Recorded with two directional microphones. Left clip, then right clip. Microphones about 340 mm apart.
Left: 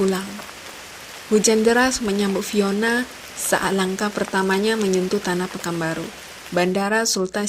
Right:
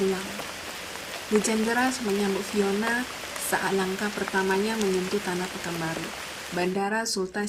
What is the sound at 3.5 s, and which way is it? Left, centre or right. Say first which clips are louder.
Speech: left 6 dB; left.